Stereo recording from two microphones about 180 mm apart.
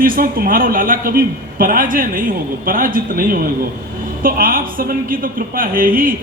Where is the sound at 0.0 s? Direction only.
55° right (ahead or behind).